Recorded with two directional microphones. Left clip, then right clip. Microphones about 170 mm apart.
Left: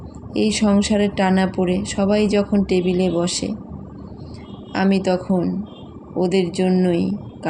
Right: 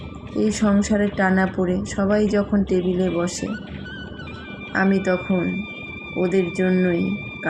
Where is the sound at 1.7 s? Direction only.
30° left (ahead or behind).